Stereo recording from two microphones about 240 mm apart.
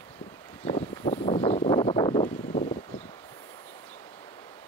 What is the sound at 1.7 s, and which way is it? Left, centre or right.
Wind, centre.